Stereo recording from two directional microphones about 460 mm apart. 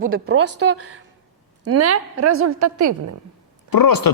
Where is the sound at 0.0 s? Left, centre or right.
Right.